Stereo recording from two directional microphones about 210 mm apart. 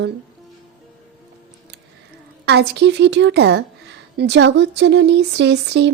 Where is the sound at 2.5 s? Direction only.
55° right (ahead or behind).